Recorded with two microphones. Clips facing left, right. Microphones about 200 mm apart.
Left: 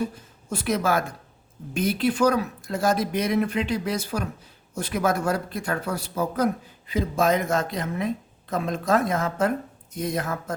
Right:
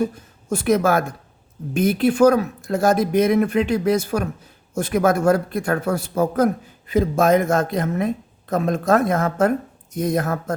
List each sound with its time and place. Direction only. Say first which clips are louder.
0.5 s a man's voice: right 6 dB; 50° right (ahead or behind)